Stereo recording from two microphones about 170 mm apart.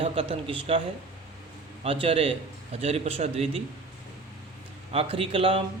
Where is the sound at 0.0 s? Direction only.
35° right (ahead or behind).